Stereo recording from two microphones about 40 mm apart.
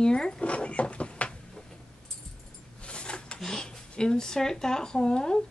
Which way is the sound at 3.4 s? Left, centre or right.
Centre.